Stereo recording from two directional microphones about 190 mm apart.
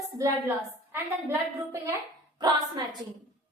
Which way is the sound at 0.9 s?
15° right (ahead or behind).